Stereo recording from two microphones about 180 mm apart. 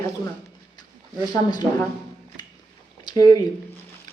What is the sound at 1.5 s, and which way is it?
Speech, 20° left (ahead or behind).